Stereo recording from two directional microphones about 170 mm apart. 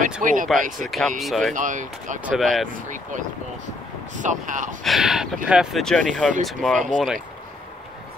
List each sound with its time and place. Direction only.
0.2 s speech: 50° right (ahead or behind)
0.8 s speech: centre (ahead or behind)
1.5 s speech: 50° right (ahead or behind)
2.2 s speech: centre (ahead or behind)
2.7 s speech: 50° right (ahead or behind)
4.8 s speech: centre (ahead or behind)